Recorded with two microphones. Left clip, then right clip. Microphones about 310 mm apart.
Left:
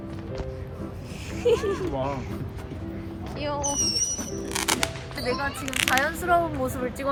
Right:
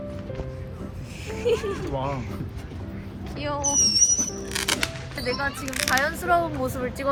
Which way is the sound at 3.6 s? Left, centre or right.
Left.